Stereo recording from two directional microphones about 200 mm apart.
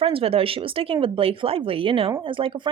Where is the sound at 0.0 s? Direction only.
30° right (ahead or behind).